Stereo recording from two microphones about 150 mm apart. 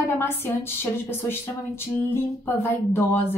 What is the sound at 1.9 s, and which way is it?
Speech, 15° left (ahead or behind).